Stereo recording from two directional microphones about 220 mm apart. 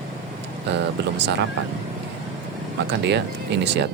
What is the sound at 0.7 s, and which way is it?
Speech, 50° right (ahead or behind).